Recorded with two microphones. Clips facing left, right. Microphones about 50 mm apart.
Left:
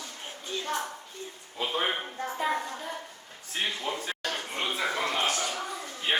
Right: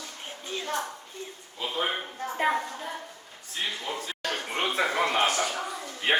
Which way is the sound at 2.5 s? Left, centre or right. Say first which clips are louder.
Right 1 dB; centre.